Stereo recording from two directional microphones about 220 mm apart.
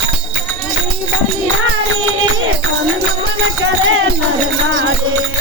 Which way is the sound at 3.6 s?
60° right (ahead or behind).